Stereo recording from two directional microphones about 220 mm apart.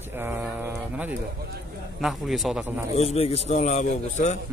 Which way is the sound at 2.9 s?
30° left (ahead or behind).